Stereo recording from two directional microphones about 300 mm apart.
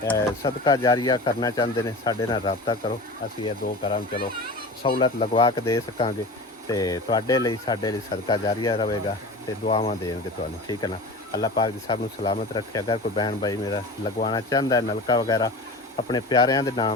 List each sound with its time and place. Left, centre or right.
0.0 s speech: centre